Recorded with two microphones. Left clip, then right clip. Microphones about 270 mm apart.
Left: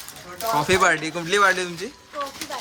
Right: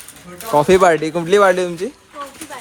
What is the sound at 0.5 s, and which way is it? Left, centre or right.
Speech, centre.